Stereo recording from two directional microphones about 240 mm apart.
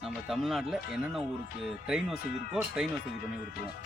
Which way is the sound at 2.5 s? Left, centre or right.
Centre.